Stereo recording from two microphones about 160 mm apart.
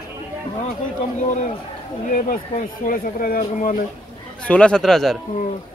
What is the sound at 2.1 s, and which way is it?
Speech, 60° left (ahead or behind).